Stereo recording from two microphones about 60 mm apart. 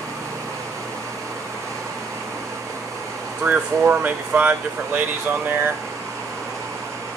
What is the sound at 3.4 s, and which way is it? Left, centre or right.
Speech, right.